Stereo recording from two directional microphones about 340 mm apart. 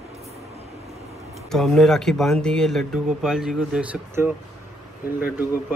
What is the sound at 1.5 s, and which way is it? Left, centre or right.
Speech, centre.